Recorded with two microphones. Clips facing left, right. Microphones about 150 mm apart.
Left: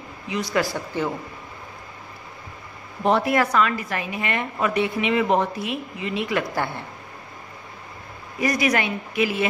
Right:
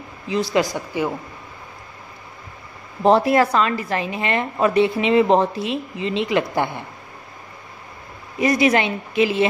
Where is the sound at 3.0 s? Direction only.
30° right (ahead or behind).